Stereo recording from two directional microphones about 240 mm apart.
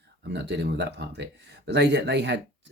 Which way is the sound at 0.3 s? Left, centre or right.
Right.